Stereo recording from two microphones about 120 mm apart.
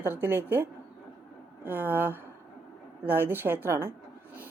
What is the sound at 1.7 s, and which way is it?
A woman's voice, 15° right (ahead or behind).